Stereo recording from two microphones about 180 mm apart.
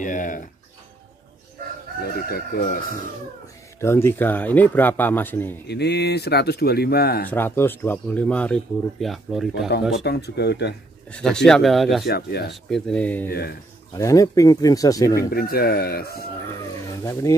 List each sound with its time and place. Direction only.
0.0 s a sound: 45° left (ahead or behind)
2.2 s speech: 55° left (ahead or behind)
3.8 s speech: 15° left (ahead or behind)
5.7 s speech: 70° left (ahead or behind)
7.2 s speech: 10° left (ahead or behind)
10.0 s speech: 65° left (ahead or behind)
11.1 s speech: 5° left (ahead or behind)
12.1 s speech: 60° left (ahead or behind)
12.6 s speech: 5° left (ahead or behind)
13.3 s speech: 60° left (ahead or behind)
13.9 s speech: 20° left (ahead or behind)
15.3 s speech: 60° left (ahead or behind)
16.6 s speech: 20° left (ahead or behind)